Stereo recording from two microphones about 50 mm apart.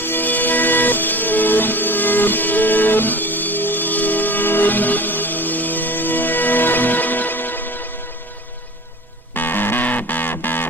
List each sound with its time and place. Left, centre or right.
0.0 s music: left
9.3 s music: left